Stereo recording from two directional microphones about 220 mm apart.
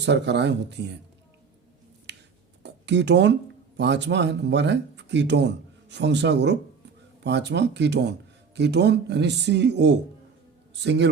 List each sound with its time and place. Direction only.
0.0 s speech: 50° right (ahead or behind)
2.1 s a sound: 50° right (ahead or behind)
2.6 s speech: 50° right (ahead or behind)